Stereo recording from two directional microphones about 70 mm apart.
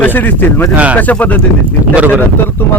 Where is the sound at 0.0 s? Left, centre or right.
Left.